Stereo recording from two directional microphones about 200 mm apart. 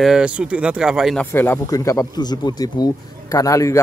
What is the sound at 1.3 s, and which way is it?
Speech, 10° left (ahead or behind).